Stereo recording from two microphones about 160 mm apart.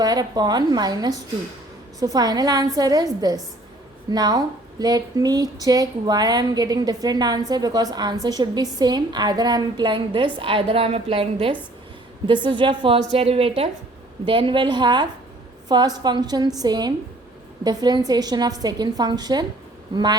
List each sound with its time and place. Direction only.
0.0 s a woman's voice: 25° right (ahead or behind)